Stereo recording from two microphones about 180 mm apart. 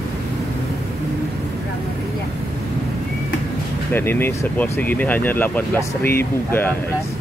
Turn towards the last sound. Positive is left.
turn(degrees=10)  # may be behind; listen again after turning